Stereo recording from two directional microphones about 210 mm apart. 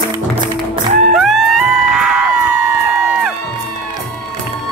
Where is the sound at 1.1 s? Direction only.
Centre (ahead or behind).